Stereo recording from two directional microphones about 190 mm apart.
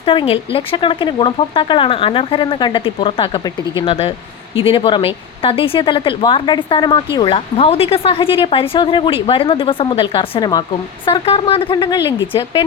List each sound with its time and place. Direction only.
0.0 s speech: 25° left (ahead or behind)